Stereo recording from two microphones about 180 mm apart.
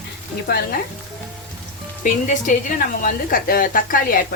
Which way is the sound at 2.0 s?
45° left (ahead or behind).